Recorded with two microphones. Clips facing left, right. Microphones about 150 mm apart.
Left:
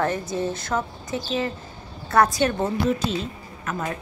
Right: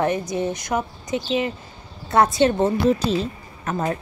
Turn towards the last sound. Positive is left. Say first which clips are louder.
# right 4 dB
turn(degrees=-35)  # may be behind; listen again after turning